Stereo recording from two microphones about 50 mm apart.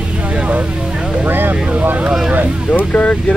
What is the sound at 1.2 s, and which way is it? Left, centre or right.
Speech, right.